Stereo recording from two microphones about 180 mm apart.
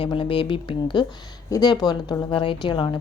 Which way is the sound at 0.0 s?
30° left (ahead or behind).